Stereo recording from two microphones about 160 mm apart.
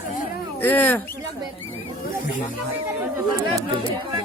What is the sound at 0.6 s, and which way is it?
Speech, 10° left (ahead or behind).